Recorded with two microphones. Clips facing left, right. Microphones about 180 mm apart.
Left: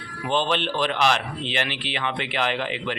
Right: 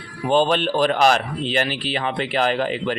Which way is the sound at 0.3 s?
40° right (ahead or behind).